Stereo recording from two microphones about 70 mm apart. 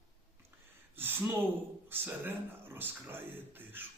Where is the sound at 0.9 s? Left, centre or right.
Right.